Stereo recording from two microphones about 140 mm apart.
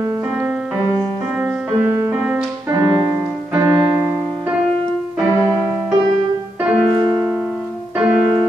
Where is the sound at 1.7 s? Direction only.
20° right (ahead or behind).